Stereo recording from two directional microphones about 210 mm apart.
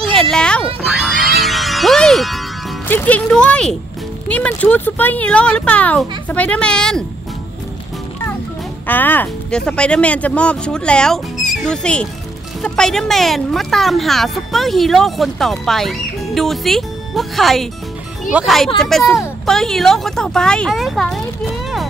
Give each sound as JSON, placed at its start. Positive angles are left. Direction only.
{"t": 0.0, "sound": "a sound", "side_deg": 0}
{"t": 0.8, "sound": "speech", "side_deg": 0}
{"t": 8.8, "sound": "speech", "side_deg": 10}